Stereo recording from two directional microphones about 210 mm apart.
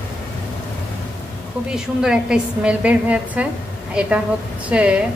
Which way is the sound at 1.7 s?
5° right (ahead or behind).